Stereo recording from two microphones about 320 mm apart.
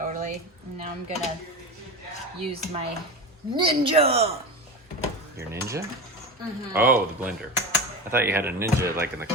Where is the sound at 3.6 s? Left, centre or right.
Centre.